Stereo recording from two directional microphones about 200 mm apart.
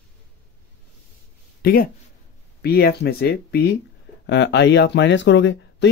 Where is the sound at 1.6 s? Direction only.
50° left (ahead or behind).